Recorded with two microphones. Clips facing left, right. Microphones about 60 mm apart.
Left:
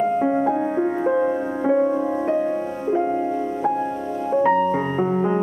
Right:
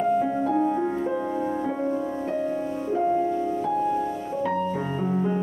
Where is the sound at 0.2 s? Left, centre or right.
Left.